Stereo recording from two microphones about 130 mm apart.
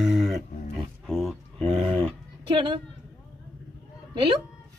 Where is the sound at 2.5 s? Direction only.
40° right (ahead or behind).